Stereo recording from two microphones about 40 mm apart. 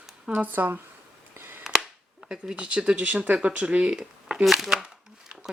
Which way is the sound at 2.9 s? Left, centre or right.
Right.